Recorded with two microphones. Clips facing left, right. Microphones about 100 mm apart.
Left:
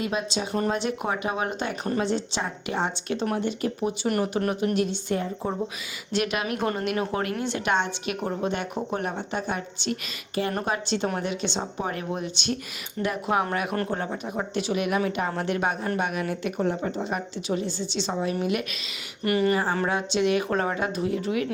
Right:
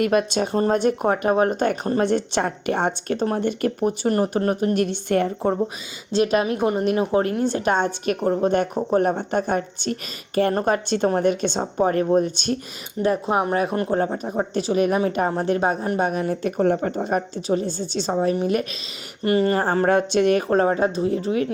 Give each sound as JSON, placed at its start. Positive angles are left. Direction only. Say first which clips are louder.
{"t": 0.0, "sound": "speech", "louder": "right 8 dB", "side_deg": -60}
{"t": 2.0, "sound": "speech", "louder": "right 6 dB", "side_deg": -55}
{"t": 4.1, "sound": "a woman's voice", "louder": "right 5 dB", "side_deg": -35}
{"t": 4.7, "sound": "speech", "louder": "right 5 dB", "side_deg": -55}
{"t": 6.1, "sound": "a woman's voice", "louder": "right 7 dB", "side_deg": -35}
{"t": 6.6, "sound": "speech", "louder": "right 6 dB", "side_deg": -15}
{"t": 7.0, "sound": "a woman's voice", "louder": "right 7 dB", "side_deg": -30}
{"t": 13.0, "sound": "a woman's voice", "louder": "right 5 dB", "side_deg": -30}